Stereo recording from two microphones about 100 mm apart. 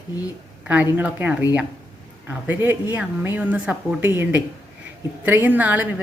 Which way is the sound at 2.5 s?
20° right (ahead or behind).